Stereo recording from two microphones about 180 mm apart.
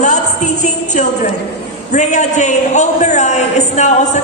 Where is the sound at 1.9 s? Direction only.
40° left (ahead or behind).